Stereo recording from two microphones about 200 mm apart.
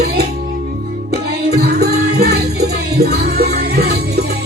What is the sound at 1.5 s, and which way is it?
Music, 50° right (ahead or behind).